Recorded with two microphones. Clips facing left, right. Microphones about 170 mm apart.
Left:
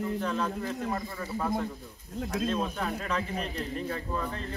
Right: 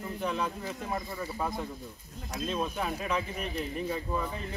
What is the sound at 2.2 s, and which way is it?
Speech, 65° left (ahead or behind).